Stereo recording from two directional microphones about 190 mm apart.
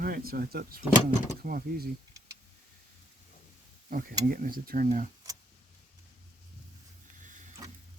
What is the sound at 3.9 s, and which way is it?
Speech, 50° right (ahead or behind).